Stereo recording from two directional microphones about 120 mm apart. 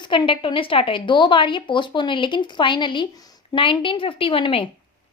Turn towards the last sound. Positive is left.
turn(degrees=50)  # may be behind; listen again after turning